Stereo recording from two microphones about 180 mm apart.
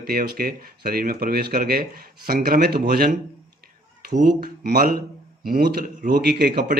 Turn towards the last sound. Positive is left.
turn(degrees=-55)  # may be behind; listen again after turning